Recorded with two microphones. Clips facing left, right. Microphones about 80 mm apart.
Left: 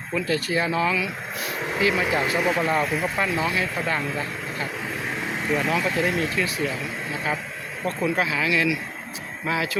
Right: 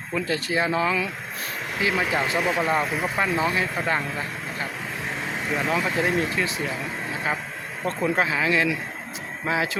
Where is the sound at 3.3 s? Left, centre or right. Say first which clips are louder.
Right 1 dB; right.